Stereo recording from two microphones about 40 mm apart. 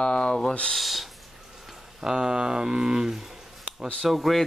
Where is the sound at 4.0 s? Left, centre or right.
Centre.